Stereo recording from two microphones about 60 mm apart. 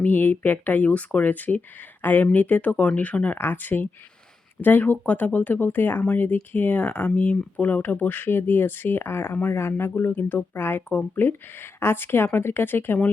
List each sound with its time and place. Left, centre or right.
0.0 s speech: left
3.3 s speech: left